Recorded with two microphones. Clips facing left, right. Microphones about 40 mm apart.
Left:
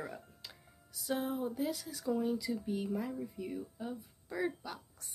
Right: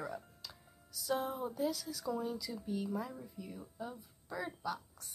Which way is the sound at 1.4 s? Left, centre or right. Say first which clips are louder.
Even; centre.